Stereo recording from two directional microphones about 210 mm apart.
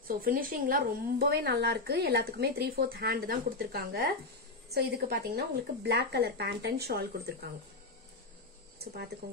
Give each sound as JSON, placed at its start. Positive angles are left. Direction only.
{"t": 0.2, "sound": "a woman's voice", "side_deg": -40}